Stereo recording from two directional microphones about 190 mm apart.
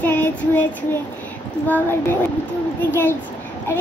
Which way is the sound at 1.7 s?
10° left (ahead or behind).